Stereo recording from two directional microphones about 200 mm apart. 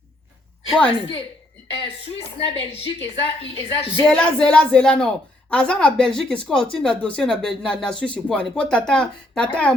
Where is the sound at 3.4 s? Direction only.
25° left (ahead or behind).